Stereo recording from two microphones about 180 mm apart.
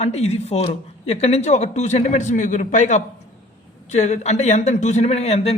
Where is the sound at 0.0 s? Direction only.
35° left (ahead or behind).